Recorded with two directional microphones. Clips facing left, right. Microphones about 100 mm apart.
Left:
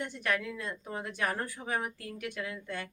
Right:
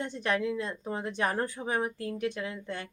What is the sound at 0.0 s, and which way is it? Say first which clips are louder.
A woman's voice: right 3 dB; 25° right (ahead or behind).